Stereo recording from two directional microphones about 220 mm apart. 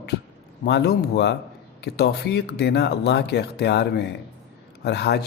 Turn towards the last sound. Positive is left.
turn(degrees=50)  # may be behind; listen again after turning